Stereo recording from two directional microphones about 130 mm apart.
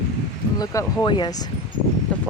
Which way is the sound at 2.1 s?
10° left (ahead or behind).